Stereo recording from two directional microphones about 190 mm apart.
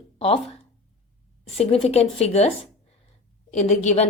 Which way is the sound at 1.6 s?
30° left (ahead or behind).